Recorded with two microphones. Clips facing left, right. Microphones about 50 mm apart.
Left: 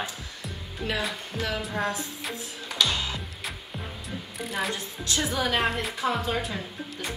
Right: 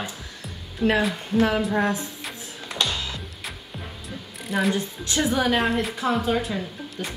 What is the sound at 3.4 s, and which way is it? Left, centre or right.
Music, centre.